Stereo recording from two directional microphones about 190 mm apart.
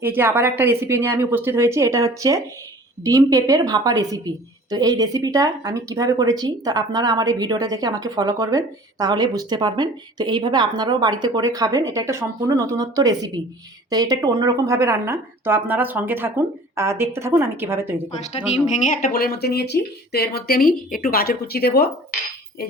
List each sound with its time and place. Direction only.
0.0 s a woman's voice: 10° right (ahead or behind)
18.2 s speech: 35° left (ahead or behind); by 21.8 s 55° left (ahead or behind)